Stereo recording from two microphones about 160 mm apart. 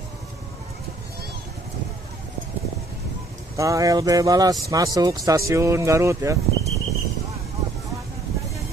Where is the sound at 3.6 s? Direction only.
20° right (ahead or behind).